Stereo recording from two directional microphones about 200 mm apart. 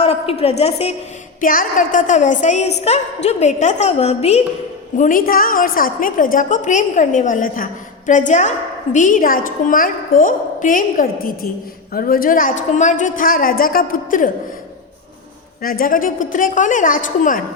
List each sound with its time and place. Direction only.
0.0 s a woman's voice: 30° left (ahead or behind)
1.4 s a woman's voice: 45° left (ahead or behind)
15.6 s a woman's voice: 45° left (ahead or behind)